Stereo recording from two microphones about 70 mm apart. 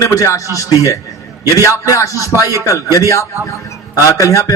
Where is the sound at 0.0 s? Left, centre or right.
Left.